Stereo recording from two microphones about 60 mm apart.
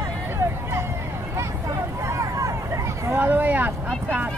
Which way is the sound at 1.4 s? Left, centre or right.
Right.